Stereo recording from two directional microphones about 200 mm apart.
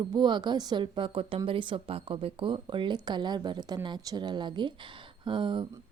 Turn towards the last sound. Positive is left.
turn(degrees=-25)  # may be behind; listen again after turning